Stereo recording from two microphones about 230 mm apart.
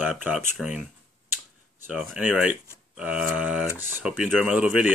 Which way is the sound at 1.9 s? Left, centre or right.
Centre.